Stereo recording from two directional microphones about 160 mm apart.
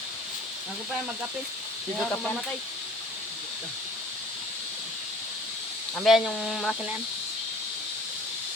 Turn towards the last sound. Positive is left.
turn(degrees=0)  # may be behind; listen again after turning